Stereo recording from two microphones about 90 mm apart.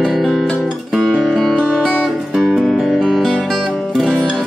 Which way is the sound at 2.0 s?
5° right (ahead or behind).